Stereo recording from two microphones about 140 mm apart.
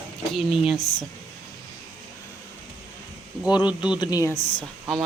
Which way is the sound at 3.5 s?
30° left (ahead or behind).